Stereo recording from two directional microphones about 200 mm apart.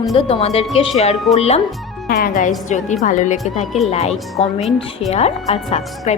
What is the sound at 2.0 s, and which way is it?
A woman's voice, 45° left (ahead or behind).